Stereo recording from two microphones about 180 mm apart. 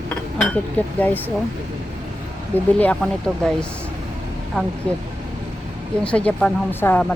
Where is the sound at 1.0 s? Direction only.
10° left (ahead or behind).